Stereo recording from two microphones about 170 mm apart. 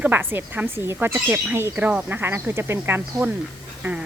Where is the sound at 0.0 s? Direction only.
10° right (ahead or behind).